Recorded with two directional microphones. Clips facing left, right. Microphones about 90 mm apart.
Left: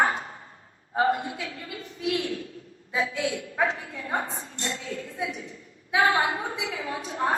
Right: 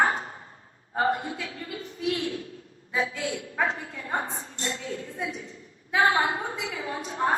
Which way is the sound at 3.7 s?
35° right (ahead or behind).